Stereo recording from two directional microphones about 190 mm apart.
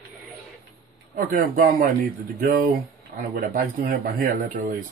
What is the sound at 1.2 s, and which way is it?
Speech, 45° right (ahead or behind).